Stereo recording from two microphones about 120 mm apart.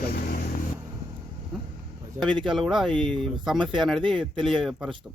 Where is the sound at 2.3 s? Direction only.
40° right (ahead or behind).